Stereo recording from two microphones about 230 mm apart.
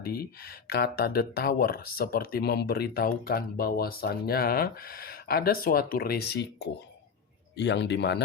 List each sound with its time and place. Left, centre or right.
0.0 s speech: left